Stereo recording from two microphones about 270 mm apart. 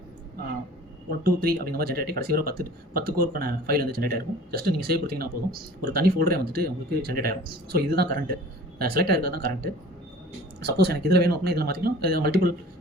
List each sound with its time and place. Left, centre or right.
1.2 s speech: right